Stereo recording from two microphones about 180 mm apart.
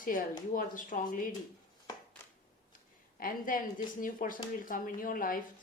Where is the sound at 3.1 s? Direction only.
50° left (ahead or behind).